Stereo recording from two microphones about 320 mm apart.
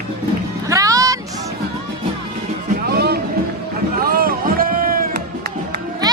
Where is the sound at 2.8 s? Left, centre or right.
Right.